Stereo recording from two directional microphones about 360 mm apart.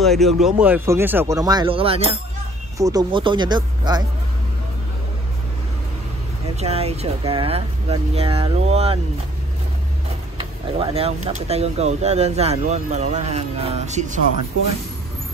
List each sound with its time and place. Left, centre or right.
0.0 s speech: centre
6.5 s speech: centre
10.8 s speech: centre